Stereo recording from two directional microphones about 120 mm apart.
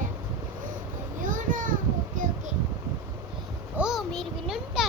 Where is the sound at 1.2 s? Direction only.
90° right.